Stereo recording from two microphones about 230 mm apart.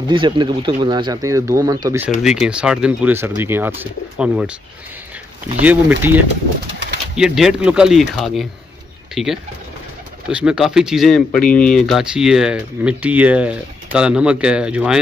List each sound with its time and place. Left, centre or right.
0.1 s speech: right
2.2 s speech: centre
5.6 s speech: centre